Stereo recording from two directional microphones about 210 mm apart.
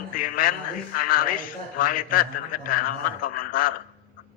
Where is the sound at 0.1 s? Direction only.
40° left (ahead or behind).